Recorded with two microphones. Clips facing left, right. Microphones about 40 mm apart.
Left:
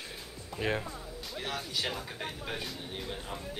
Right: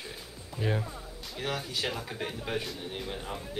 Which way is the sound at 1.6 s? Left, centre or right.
Centre.